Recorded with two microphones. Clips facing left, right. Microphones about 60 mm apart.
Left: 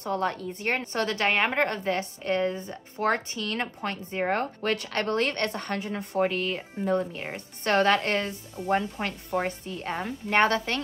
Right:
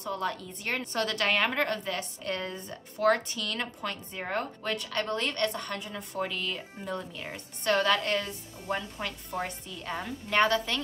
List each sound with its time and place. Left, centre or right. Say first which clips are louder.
0.0 s a woman's voice: left 4 dB; left
6.1 s a woman's voice: left 7 dB; left
8.6 s speech: left 5 dB; centre
9.0 s a woman's voice: left 6 dB; left